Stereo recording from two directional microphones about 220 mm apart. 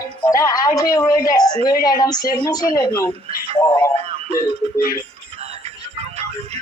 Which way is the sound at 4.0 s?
30° right (ahead or behind).